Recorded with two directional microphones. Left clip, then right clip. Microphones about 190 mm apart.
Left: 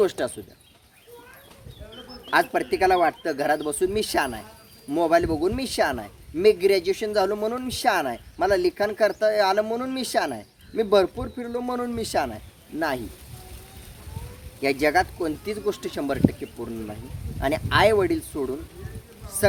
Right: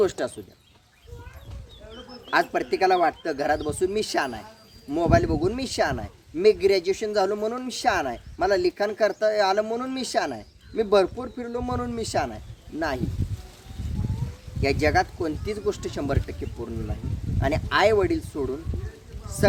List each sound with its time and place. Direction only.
0.0 s a man's voice: 20° left (ahead or behind)
2.3 s a man's voice: 20° left (ahead or behind)
14.6 s a man's voice: 25° left (ahead or behind)